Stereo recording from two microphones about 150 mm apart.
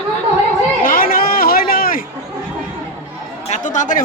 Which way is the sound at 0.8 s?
75° left (ahead or behind).